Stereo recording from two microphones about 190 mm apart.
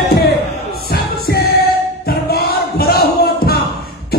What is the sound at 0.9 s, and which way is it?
Music, 55° left (ahead or behind).